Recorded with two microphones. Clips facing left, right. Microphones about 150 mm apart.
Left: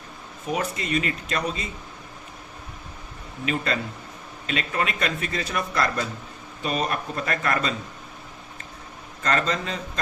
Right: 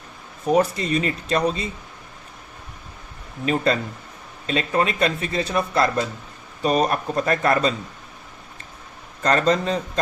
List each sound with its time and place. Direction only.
0.4 s speech: 35° right (ahead or behind)
3.4 s speech: 35° right (ahead or behind)
6.6 s speech: 40° right (ahead or behind)
9.2 s speech: 35° right (ahead or behind)